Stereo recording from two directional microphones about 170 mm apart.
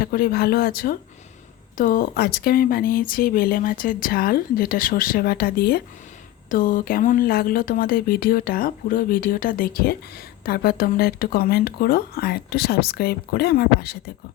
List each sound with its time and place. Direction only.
0.0 s speech: 60° left (ahead or behind)
6.5 s speech: 50° left (ahead or behind); by 14.0 s 70° left (ahead or behind)